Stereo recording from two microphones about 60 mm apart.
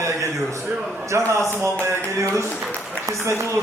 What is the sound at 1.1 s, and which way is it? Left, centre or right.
A man's voice, right.